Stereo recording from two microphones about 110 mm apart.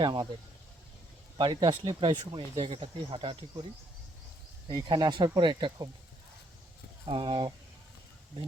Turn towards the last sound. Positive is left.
turn(degrees=-50)  # may be behind; listen again after turning